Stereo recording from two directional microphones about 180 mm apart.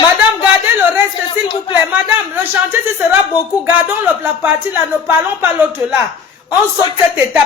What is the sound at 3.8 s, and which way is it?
Speech, 10° right (ahead or behind).